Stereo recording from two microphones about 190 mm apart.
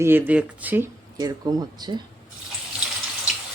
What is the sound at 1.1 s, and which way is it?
Speech, 20° right (ahead or behind).